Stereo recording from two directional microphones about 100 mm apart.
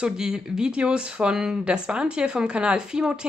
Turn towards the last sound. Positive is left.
turn(degrees=-10)  # may be behind; listen again after turning